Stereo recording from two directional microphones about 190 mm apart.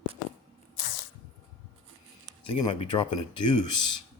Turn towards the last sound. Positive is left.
turn(degrees=25)  # may be behind; listen again after turning